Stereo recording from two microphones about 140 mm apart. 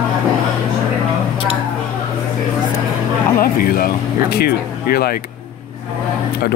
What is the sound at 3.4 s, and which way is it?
Speech, 90° left.